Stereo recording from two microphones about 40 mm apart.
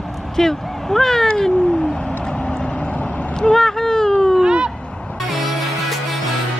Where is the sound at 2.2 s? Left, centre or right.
Left.